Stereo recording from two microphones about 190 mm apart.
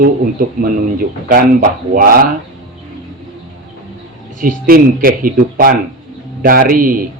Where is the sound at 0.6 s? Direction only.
50° right (ahead or behind).